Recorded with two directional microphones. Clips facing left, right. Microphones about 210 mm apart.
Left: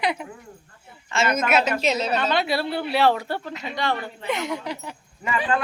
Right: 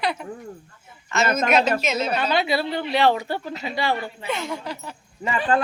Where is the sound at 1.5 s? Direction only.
10° left (ahead or behind).